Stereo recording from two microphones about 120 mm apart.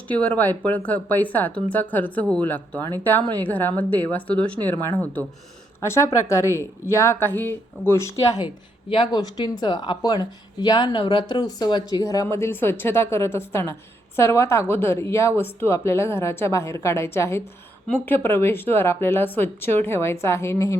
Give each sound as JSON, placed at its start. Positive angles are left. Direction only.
{"t": 0.1, "sound": "speech", "side_deg": 10}
{"t": 5.8, "sound": "a woman's voice", "side_deg": 20}
{"t": 8.9, "sound": "a woman's voice", "side_deg": 40}